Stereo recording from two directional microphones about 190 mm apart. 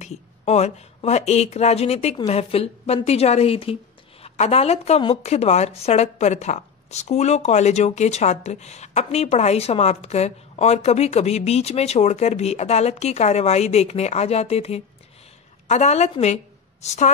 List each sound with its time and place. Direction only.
0.0 s a woman's voice: 35° left (ahead or behind)